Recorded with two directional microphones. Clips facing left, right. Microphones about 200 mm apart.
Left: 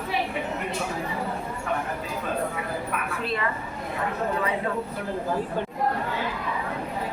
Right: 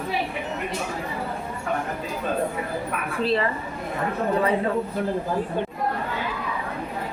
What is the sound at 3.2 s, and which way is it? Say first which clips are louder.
Speech: right 8 dB; 30° right (ahead or behind).